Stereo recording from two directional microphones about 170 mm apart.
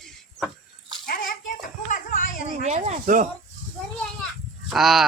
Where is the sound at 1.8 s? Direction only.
50° left (ahead or behind).